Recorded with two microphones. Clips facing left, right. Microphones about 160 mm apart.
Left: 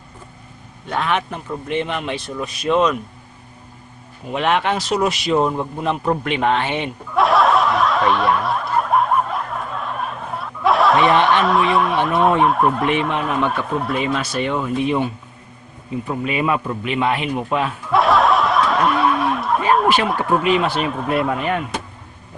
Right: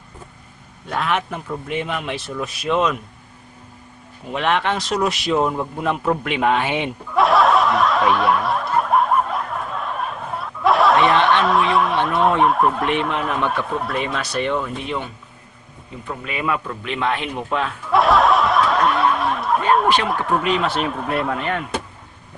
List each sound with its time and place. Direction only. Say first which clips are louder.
0.9 s speech: left 1 dB; centre (ahead or behind)
4.3 s speech: left 2 dB; 5° left (ahead or behind)
7.1 s snicker: even; centre (ahead or behind)
16.0 s speech: left 4 dB; 20° left (ahead or behind)
16.8 s snicker: left 2 dB; 10° left (ahead or behind)